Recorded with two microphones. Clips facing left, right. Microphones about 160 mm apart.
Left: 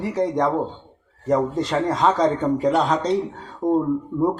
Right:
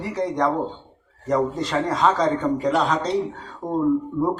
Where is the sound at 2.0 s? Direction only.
25° left (ahead or behind).